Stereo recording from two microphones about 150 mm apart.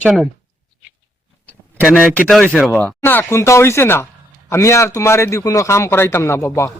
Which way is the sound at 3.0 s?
15° left (ahead or behind).